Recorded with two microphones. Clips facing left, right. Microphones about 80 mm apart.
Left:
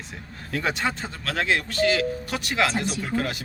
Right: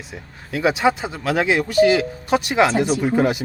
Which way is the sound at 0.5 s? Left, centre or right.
Centre.